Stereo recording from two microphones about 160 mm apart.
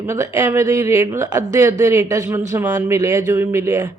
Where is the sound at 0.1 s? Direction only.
15° right (ahead or behind).